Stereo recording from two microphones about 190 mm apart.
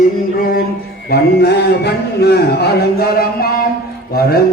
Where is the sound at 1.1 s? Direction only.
60° left (ahead or behind).